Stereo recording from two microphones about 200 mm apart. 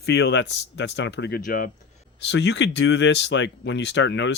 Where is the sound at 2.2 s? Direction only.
60° left (ahead or behind).